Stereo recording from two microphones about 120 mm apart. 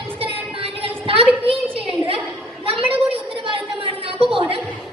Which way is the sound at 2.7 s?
50° right (ahead or behind).